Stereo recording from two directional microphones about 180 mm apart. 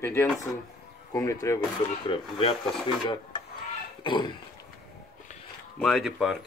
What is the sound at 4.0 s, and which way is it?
Cough, 25° left (ahead or behind).